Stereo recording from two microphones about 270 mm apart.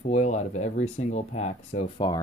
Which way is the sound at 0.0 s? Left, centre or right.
Left.